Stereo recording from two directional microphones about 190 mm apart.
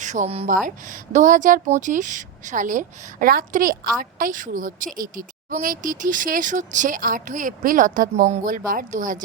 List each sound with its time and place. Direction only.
0.0 s speech: 40° right (ahead or behind)